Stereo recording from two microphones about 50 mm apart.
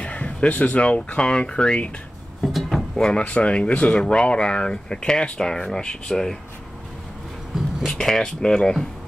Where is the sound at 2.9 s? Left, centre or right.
Centre.